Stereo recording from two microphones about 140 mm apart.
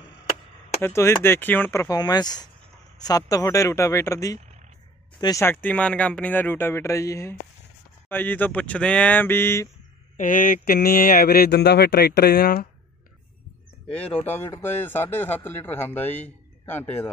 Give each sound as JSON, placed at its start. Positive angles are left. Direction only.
{"t": 0.8, "sound": "a man's voice", "side_deg": 15}
{"t": 10.1, "sound": "mantra", "side_deg": 70}
{"t": 14.2, "sound": "a man's voice", "side_deg": 15}